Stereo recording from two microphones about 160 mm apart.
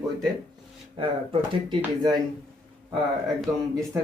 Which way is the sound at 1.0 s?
30° right (ahead or behind).